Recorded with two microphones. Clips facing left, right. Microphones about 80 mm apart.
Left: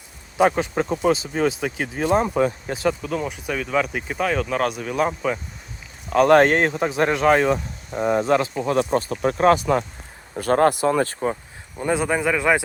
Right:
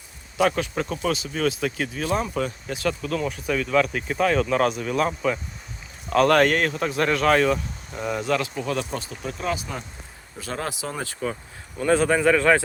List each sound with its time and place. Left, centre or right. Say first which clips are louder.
0.3 s speech: left 3 dB; left
1.9 s speech: left 5 dB; left
3.0 s speech: even; centre
6.3 s speech: left 4 dB; left
11.9 s speech: right 2 dB; centre